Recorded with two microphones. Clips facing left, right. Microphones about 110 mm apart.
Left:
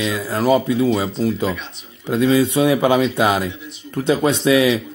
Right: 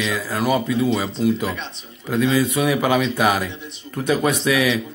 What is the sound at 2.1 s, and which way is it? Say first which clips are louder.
Speech: left 3 dB; 25° left (ahead or behind).